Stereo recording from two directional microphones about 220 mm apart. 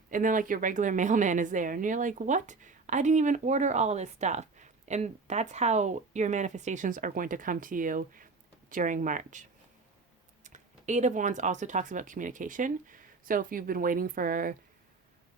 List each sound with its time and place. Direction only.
0.1 s a woman's voice: 35° right (ahead or behind)